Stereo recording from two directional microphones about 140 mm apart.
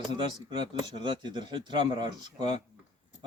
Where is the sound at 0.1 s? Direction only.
35° right (ahead or behind).